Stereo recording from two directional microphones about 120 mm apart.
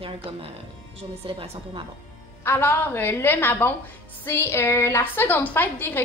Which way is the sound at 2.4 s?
20° left (ahead or behind).